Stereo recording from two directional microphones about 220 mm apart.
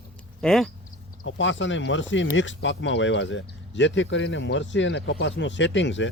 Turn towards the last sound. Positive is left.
turn(degrees=55)  # may be behind; listen again after turning